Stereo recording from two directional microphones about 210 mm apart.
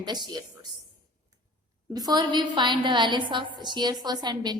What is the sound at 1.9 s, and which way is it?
A woman's voice, 20° right (ahead or behind).